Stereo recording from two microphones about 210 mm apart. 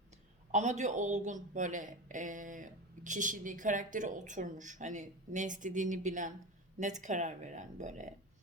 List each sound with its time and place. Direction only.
0.5 s speech: 35° right (ahead or behind)